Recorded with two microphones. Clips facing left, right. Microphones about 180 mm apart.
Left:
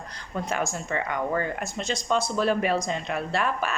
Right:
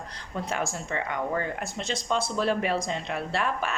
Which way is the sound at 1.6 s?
25° right (ahead or behind).